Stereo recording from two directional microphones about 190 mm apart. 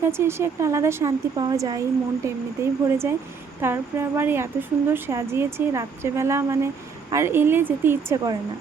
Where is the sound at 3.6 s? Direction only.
10° right (ahead or behind).